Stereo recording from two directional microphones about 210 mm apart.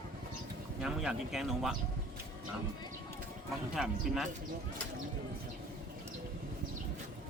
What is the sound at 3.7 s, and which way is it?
Speech, centre (ahead or behind).